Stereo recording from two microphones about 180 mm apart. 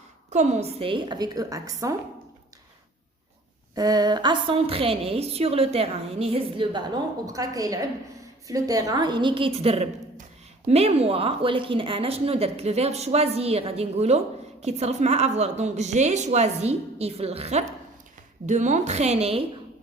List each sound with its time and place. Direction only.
0.3 s a woman's voice: 40° right (ahead or behind); by 2.0 s 20° right (ahead or behind)
3.8 s a woman's voice: 20° right (ahead or behind)